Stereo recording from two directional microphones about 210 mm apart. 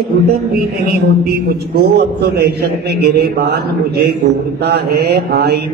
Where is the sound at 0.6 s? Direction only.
45° right (ahead or behind).